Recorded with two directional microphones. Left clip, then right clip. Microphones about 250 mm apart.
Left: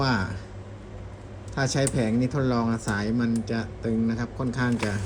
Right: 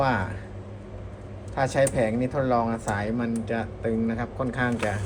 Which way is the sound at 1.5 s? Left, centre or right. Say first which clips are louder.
Right 4 dB; left.